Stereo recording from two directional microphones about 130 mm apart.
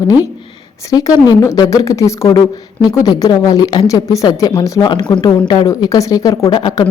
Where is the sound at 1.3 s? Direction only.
30° left (ahead or behind).